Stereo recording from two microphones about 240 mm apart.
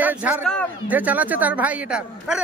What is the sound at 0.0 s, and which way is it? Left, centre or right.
A man's voice, centre.